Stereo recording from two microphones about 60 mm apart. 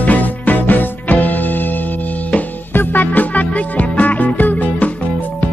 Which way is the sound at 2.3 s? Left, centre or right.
Left.